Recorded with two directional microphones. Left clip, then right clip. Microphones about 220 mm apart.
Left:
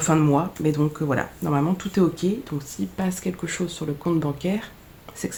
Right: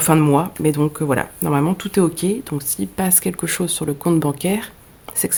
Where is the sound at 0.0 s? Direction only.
45° right (ahead or behind).